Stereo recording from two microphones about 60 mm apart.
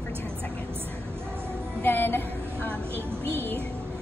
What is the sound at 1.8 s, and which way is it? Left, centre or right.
Speech, left.